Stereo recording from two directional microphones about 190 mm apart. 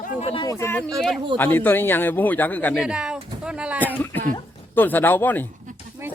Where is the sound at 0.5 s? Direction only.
10° left (ahead or behind).